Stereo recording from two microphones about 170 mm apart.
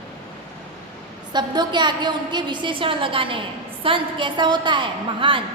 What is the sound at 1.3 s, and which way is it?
A woman's voice, 25° right (ahead or behind).